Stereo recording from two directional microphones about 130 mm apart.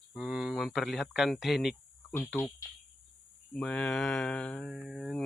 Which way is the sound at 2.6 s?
25° left (ahead or behind).